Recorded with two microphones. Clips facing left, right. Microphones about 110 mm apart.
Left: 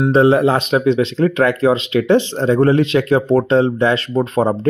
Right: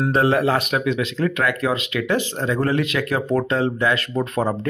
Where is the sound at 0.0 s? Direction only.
25° left (ahead or behind).